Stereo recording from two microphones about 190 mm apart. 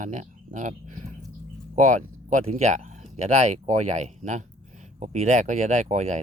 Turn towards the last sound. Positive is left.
turn(degrees=-40)  # may be behind; listen again after turning